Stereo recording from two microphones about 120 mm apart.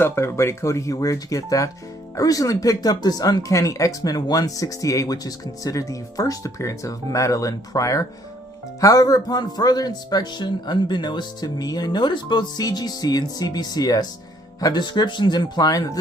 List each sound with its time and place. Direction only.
0.0 s speech: 20° left (ahead or behind)